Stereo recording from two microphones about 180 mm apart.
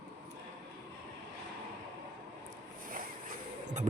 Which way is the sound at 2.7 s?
50° right (ahead or behind).